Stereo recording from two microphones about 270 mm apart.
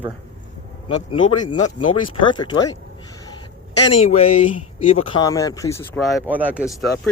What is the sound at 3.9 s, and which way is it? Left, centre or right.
Speech, left.